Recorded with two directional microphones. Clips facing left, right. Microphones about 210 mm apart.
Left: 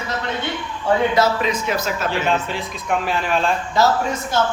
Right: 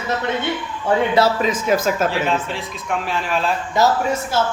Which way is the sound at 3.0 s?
Centre (ahead or behind).